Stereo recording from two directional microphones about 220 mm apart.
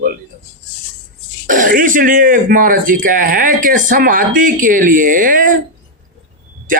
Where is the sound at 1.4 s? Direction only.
35° right (ahead or behind).